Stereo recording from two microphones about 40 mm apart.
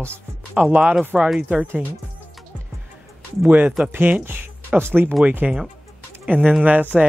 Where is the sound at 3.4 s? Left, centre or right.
Right.